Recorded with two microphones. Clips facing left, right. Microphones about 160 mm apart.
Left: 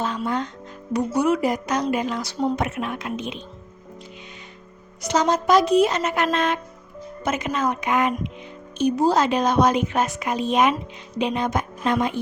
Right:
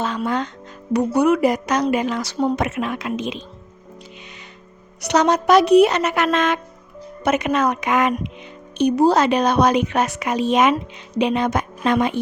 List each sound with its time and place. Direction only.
0.0 s speech: 85° right
0.9 s a woman's voice: 60° right (ahead or behind); by 3.4 s 90° right
5.0 s a woman's voice: 70° right (ahead or behind); by 6.6 s 90° right
7.3 s a woman's voice: 70° right (ahead or behind); by 8.1 s 90° right
8.8 s a woman's voice: 70° right (ahead or behind); by 10.8 s 90° right
11.2 s a woman's voice: 75° right (ahead or behind)